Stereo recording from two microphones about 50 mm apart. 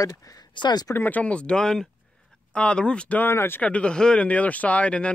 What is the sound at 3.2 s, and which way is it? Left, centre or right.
Speech, left.